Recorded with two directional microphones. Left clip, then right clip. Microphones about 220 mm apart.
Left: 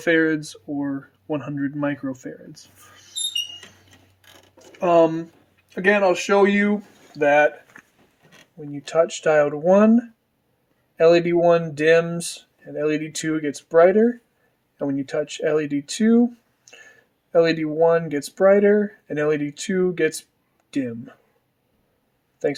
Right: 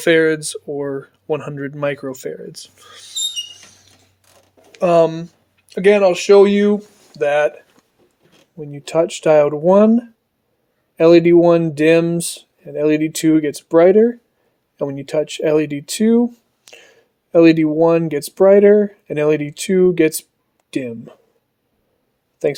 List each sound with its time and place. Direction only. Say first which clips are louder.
0.0 s speech: right 6 dB; 55° right (ahead or behind)
4.7 s speech: right 3 dB; 60° right (ahead or behind); by 7.5 s 40° right (ahead or behind)
8.7 s speech: right 3 dB; 40° right (ahead or behind)